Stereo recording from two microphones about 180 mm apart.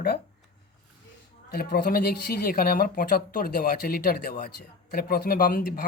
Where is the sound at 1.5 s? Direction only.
55° left (ahead or behind).